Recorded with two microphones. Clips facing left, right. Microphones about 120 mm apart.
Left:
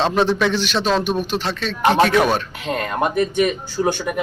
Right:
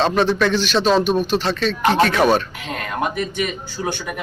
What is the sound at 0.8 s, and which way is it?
Speech, 15° right (ahead or behind).